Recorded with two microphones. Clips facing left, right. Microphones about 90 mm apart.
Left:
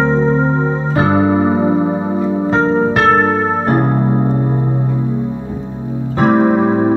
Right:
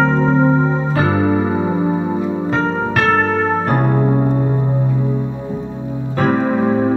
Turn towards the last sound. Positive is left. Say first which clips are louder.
# left 3 dB
turn(degrees=25)  # may be behind; listen again after turning